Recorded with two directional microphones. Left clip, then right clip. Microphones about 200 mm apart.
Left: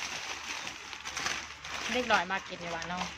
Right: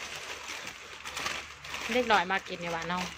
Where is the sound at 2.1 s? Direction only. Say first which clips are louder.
Right 2 dB; 20° right (ahead or behind).